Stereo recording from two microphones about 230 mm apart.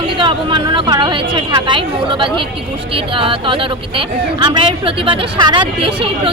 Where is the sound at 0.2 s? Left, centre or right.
Centre.